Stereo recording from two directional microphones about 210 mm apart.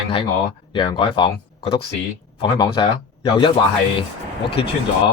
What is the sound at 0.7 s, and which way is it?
Speech, 25° left (ahead or behind).